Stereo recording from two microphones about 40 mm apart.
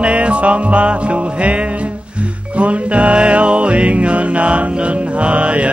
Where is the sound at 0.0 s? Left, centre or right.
Right.